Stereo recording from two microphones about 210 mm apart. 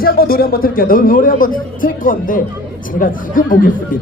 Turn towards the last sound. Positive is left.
turn(degrees=40)  # may be behind; listen again after turning